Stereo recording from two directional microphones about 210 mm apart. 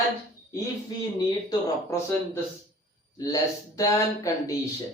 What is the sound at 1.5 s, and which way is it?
Speech, 15° left (ahead or behind).